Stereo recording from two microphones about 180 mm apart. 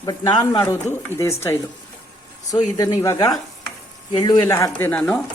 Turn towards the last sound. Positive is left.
turn(degrees=5)  # may be behind; listen again after turning